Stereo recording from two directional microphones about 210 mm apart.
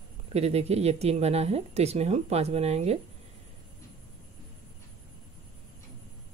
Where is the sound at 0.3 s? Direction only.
30° right (ahead or behind).